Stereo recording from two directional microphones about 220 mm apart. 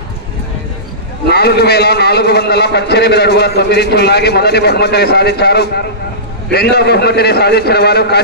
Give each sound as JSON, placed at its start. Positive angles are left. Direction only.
{"t": 1.3, "sound": "a man's voice", "side_deg": 50}